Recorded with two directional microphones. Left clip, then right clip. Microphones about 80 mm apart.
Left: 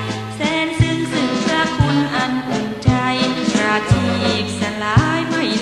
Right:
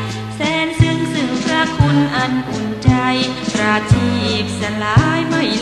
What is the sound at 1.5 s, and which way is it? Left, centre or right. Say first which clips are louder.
Music: right 4 dB; left.